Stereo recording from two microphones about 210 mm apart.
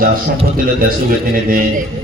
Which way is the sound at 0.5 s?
45° right (ahead or behind).